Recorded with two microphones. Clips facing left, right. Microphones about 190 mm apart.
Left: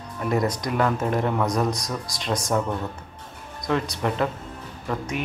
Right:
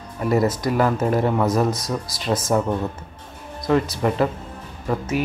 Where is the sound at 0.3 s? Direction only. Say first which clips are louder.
Right 4 dB; 5° right (ahead or behind).